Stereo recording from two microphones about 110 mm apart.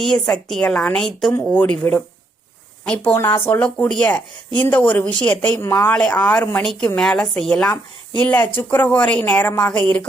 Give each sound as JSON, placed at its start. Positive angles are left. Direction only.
{"t": 0.0, "sound": "a woman's voice", "side_deg": 5}